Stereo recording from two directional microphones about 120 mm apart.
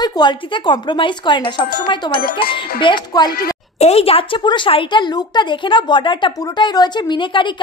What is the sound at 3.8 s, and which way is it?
A woman's voice, 55° left (ahead or behind).